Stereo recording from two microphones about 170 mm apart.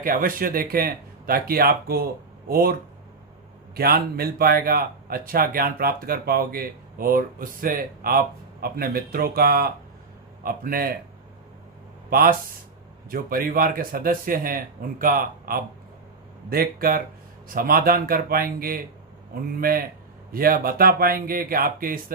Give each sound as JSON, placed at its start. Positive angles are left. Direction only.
{"t": 0.0, "sound": "speech", "side_deg": -55}
{"t": 3.8, "sound": "speech", "side_deg": -65}
{"t": 12.1, "sound": "speech", "side_deg": -60}